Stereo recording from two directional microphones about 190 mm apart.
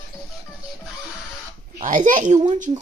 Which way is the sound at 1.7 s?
45° right (ahead or behind).